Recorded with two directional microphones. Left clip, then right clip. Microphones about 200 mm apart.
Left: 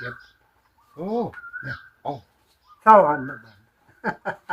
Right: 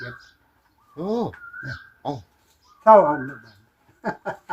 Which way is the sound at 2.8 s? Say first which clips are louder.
Even; 10° left (ahead or behind).